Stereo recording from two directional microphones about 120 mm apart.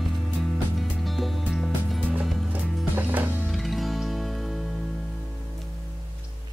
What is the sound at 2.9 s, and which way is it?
Music, 15° right (ahead or behind).